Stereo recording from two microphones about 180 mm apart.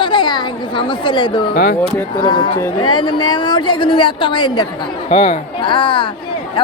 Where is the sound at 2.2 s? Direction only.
25° left (ahead or behind).